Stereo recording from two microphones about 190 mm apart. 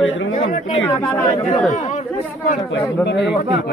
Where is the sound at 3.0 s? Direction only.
65° left (ahead or behind).